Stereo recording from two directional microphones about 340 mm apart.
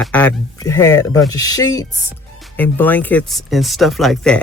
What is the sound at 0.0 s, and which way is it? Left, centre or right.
A man's voice, centre.